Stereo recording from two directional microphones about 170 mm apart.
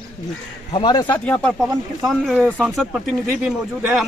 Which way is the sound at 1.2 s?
5° left (ahead or behind).